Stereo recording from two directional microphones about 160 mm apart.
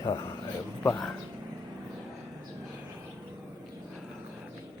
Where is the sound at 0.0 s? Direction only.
20° left (ahead or behind).